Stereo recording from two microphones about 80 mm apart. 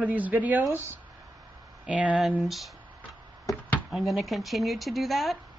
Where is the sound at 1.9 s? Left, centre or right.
Centre.